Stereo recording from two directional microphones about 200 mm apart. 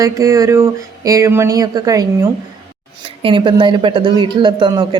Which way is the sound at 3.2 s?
25° right (ahead or behind).